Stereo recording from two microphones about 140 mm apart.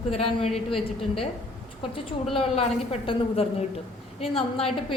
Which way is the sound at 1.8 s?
40° left (ahead or behind).